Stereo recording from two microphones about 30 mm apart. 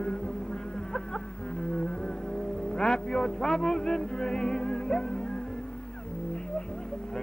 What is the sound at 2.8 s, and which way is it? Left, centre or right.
A man's voice, left.